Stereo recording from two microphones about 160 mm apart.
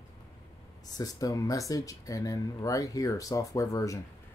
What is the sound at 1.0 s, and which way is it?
Speech, 20° left (ahead or behind).